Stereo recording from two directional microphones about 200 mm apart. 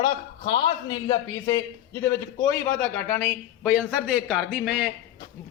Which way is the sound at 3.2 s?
5° right (ahead or behind).